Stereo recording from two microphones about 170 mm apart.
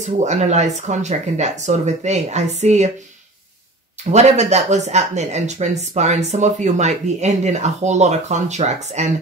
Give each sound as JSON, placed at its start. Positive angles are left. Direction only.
{"t": 0.0, "sound": "speech", "side_deg": -45}
{"t": 4.0, "sound": "speech", "side_deg": -40}